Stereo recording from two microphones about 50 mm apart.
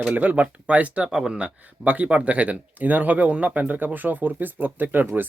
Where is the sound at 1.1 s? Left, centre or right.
Centre.